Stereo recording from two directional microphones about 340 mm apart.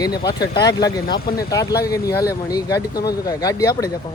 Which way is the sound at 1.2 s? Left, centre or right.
Left.